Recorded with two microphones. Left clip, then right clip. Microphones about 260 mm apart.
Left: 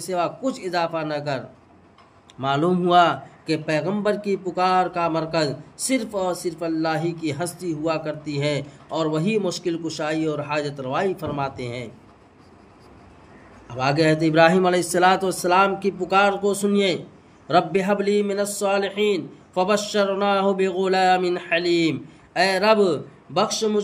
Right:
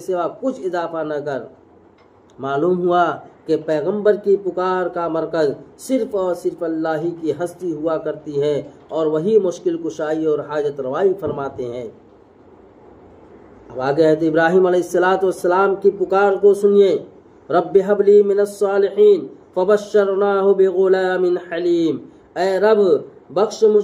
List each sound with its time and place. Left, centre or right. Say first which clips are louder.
0.0 s a man's voice: right 3 dB; left
2.4 s a man's voice: right 3 dB; left
13.7 s a man's voice: right 4 dB; left